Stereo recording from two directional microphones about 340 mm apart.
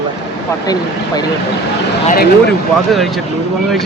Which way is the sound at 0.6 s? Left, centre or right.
Centre.